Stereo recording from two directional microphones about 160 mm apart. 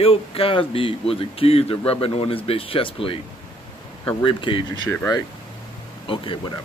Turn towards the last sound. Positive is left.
turn(degrees=30)  # may be behind; listen again after turning